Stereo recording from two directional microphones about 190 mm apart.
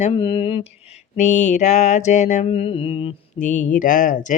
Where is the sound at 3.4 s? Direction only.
40° left (ahead or behind).